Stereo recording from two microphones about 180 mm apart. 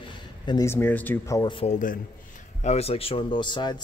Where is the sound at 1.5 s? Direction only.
40° left (ahead or behind).